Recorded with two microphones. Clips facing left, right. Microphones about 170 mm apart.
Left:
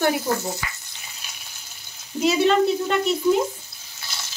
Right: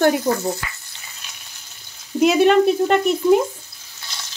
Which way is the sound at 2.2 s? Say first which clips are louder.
Right 4 dB; 55° right (ahead or behind).